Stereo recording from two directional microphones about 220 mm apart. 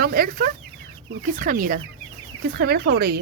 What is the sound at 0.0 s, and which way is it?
Chicken, 45° right (ahead or behind).